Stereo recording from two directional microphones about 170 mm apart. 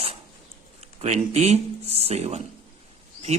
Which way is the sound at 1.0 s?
40° right (ahead or behind).